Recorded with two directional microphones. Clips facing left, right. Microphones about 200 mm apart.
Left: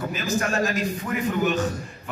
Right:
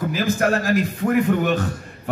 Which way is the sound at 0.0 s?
55° right (ahead or behind).